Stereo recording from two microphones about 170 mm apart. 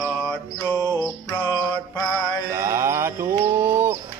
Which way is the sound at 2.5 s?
15° right (ahead or behind).